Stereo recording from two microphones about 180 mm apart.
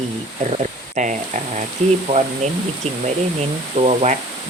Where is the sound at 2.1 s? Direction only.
30° right (ahead or behind).